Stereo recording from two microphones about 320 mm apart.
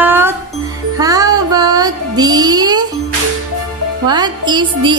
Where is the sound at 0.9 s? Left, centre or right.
Centre.